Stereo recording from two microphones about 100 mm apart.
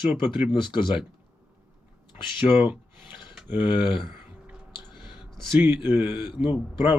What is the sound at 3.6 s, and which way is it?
Speech, 55° left (ahead or behind).